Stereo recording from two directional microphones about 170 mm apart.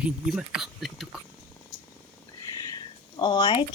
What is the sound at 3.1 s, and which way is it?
Speech, 25° left (ahead or behind).